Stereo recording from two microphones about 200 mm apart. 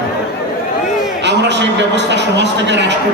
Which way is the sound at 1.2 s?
60° right (ahead or behind).